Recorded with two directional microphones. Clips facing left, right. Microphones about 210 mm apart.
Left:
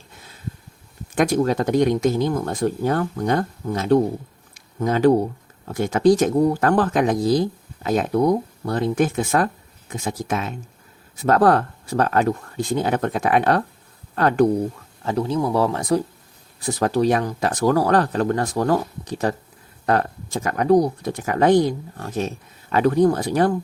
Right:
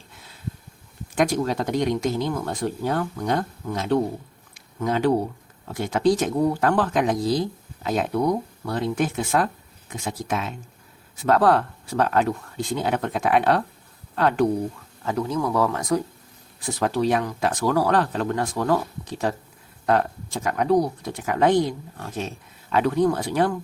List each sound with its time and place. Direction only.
1.1 s speech: 50° left (ahead or behind)
4.5 s a sound: 45° left (ahead or behind)
5.6 s speech: 45° left (ahead or behind)
15.0 s speech: 30° left (ahead or behind)
16.6 s speech: 40° left (ahead or behind)